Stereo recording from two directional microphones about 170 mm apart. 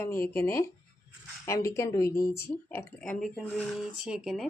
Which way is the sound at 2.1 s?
60° left (ahead or behind).